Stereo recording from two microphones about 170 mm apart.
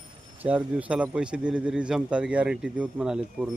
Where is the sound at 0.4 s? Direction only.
10° right (ahead or behind).